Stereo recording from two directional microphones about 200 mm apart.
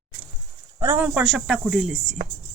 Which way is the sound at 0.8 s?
10° right (ahead or behind).